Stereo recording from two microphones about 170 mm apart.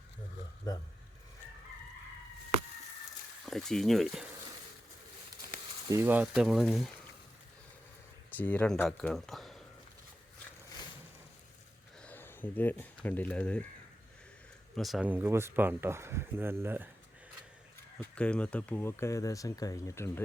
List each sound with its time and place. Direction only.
3.4 s speech: centre (ahead or behind)
5.9 s speech: 10° right (ahead or behind)
8.4 s speech: 10° left (ahead or behind)
12.0 s speech: 10° left (ahead or behind)
14.8 s speech: centre (ahead or behind)
18.0 s speech: 5° left (ahead or behind)